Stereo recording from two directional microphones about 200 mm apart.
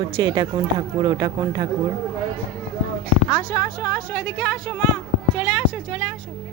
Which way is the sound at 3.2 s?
15° left (ahead or behind).